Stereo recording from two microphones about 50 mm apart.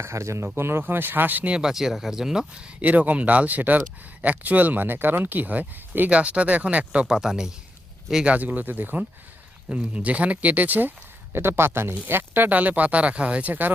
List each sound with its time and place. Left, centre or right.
0.0 s speech: right
0.4 s speech: right
1.5 s speech: centre
1.7 s speech: centre
2.8 s speech: right
6.1 s speech: right
7.2 s speech: centre
8.3 s speech: right
9.6 s speech: right